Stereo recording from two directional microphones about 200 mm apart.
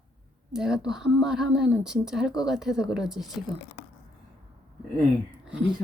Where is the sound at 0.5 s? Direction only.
5° right (ahead or behind).